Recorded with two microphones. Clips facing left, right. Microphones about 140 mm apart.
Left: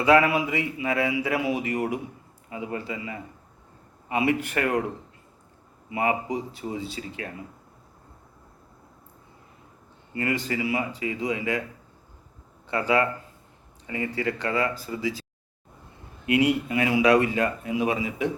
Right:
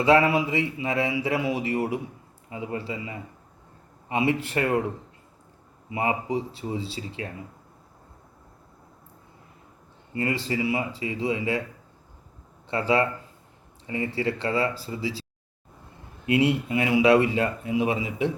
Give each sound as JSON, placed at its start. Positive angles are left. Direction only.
{"t": 0.0, "sound": "speech", "side_deg": -30}
{"t": 5.9, "sound": "speech", "side_deg": -25}
{"t": 10.2, "sound": "speech", "side_deg": -30}
{"t": 12.6, "sound": "speech", "side_deg": -30}
{"t": 16.2, "sound": "speech", "side_deg": -25}